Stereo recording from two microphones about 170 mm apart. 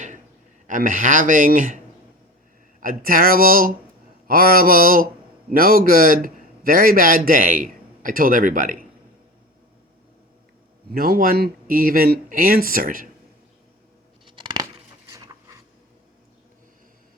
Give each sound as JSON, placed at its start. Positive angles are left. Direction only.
{"t": 0.7, "sound": "a man's voice", "side_deg": -50}
{"t": 2.8, "sound": "a man's voice", "side_deg": -55}
{"t": 10.9, "sound": "a man's voice", "side_deg": -60}
{"t": 14.3, "sound": "a sound", "side_deg": -30}